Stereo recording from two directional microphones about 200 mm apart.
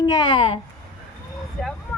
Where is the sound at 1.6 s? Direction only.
5° left (ahead or behind).